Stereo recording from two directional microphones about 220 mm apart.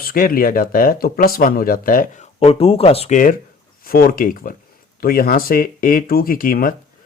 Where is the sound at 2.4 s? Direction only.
25° left (ahead or behind).